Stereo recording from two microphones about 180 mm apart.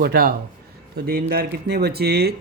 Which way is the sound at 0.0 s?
60° right (ahead or behind).